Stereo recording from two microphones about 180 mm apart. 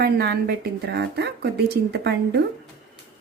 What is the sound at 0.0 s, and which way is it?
A woman's voice, 60° right (ahead or behind).